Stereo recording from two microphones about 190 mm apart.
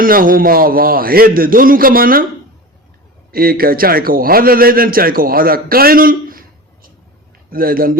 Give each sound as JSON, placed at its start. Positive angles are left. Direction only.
{"t": 0.0, "sound": "a man's voice", "side_deg": -50}
{"t": 3.3, "sound": "a man's voice", "side_deg": -50}
{"t": 7.5, "sound": "a man's voice", "side_deg": -50}